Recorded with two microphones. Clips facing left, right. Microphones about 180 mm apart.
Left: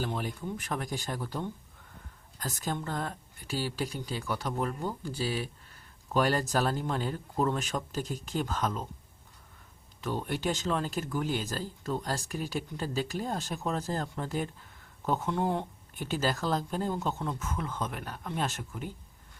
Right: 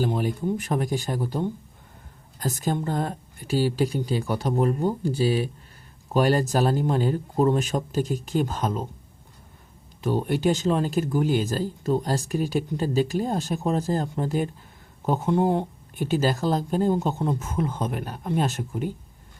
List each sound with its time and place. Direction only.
0.0 s speech: 15° right (ahead or behind)
0.4 s speech: 25° right (ahead or behind)
2.8 s speech: 25° right (ahead or behind)
10.0 s speech: 15° right (ahead or behind)
17.2 s speech: 30° right (ahead or behind)